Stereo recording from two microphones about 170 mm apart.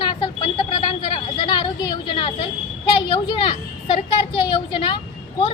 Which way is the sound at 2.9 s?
30° left (ahead or behind).